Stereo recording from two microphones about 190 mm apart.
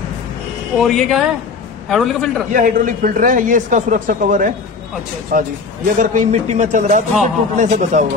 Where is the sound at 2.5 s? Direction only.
45° right (ahead or behind).